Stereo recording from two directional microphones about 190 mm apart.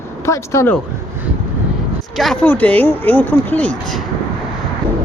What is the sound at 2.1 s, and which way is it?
Speech, centre (ahead or behind).